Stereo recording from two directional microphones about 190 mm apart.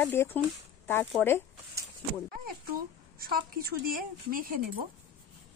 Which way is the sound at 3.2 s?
50° right (ahead or behind).